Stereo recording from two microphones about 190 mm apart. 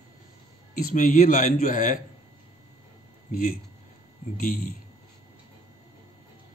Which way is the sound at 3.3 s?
45° left (ahead or behind).